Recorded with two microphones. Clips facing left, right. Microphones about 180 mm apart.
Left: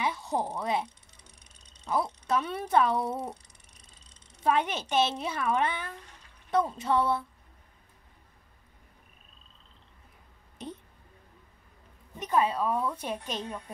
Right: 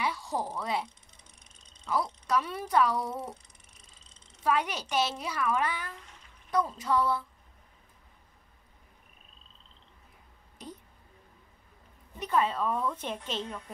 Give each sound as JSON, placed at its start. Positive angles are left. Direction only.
{"t": 0.0, "sound": "speech", "side_deg": 20}
{"t": 2.2, "sound": "a child's voice", "side_deg": 25}
{"t": 4.4, "sound": "a child's voice", "side_deg": 25}
{"t": 10.6, "sound": "a sound", "side_deg": 25}
{"t": 12.2, "sound": "speech", "side_deg": 15}